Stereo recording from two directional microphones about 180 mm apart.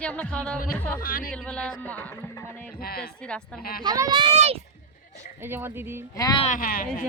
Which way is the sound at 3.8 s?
20° right (ahead or behind).